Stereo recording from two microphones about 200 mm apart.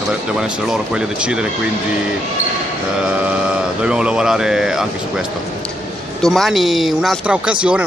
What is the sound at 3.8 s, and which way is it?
Speech, 5° right (ahead or behind).